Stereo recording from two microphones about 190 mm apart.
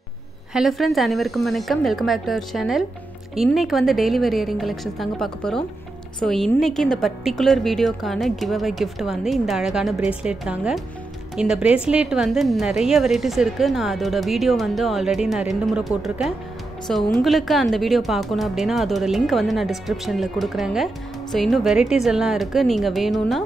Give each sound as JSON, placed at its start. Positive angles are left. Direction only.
{"t": 0.5, "sound": "a woman's voice", "side_deg": 0}